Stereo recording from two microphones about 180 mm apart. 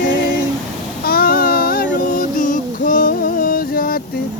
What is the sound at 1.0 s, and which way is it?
Child singing, 55° left (ahead or behind).